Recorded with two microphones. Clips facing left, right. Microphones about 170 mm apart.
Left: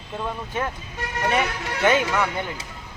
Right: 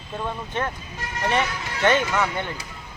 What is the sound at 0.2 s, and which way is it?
Speech, 5° left (ahead or behind).